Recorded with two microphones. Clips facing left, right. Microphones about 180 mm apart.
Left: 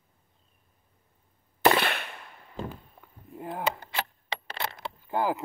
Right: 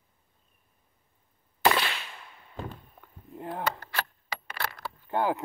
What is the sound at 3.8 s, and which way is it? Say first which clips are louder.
Keys jangling: left 1 dB; 20° left (ahead or behind).